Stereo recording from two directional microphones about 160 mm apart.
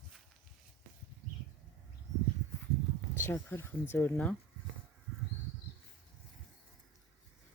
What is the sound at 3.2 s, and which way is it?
Speech, 15° left (ahead or behind).